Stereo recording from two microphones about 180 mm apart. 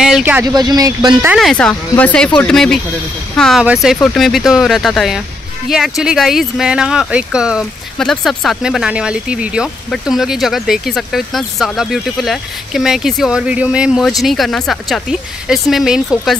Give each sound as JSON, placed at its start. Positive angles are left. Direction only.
{"t": 0.0, "sound": "speech", "side_deg": -5}
{"t": 1.2, "sound": "speech", "side_deg": 0}